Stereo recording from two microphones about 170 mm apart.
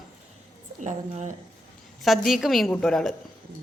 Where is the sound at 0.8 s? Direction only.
45° right (ahead or behind).